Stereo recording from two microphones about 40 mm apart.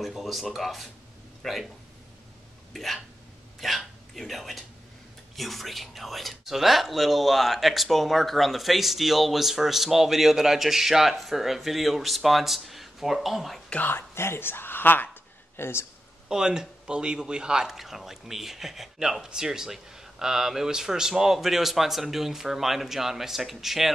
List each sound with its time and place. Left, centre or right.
0.0 s speech: centre
2.7 s speech: centre
13.9 s speech: left
15.5 s speech: left
16.3 s a man's voice: centre
17.7 s speech: centre